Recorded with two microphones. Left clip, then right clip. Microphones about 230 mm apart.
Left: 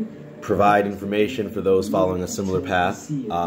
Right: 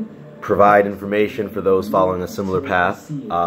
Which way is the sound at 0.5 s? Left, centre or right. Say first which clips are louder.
Right 5 dB; centre.